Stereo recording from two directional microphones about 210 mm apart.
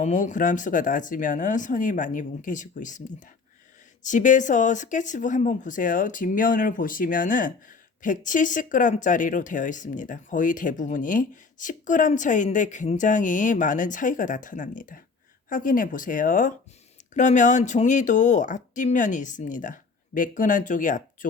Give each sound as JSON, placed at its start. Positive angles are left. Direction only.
{"t": 0.0, "sound": "speech", "side_deg": 35}